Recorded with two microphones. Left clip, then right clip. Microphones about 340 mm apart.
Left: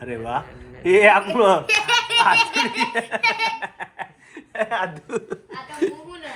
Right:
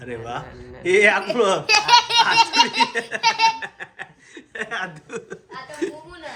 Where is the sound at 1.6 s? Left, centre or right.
Right.